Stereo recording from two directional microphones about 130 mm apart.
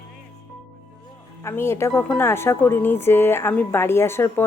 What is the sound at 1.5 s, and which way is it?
Speech, 20° left (ahead or behind).